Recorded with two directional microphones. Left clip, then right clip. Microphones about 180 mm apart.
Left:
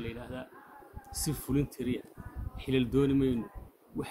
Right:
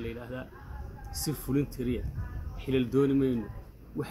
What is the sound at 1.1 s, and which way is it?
Speech, 55° left (ahead or behind).